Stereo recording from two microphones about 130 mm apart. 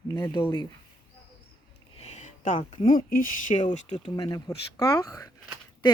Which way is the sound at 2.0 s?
60° left (ahead or behind).